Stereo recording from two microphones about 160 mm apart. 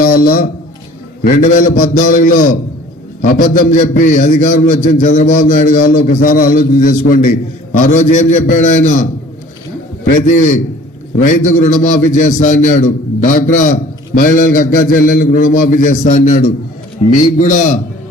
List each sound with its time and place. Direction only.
0.0 s a sound: 65° left (ahead or behind)
1.2 s a man's voice: 50° left (ahead or behind)
10.1 s a man's voice: 55° left (ahead or behind)